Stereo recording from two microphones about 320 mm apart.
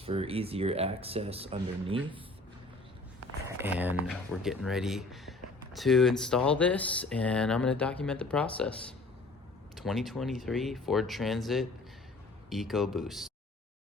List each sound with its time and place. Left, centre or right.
0.0 s speech: centre
3.6 s speech: centre